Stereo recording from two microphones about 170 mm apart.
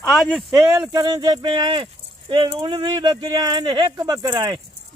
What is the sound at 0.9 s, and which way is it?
Speech, 25° right (ahead or behind).